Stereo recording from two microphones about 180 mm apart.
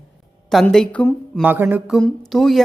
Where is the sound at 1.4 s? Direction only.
10° right (ahead or behind).